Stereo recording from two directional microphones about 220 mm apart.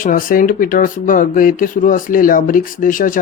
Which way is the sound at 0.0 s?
40° left (ahead or behind).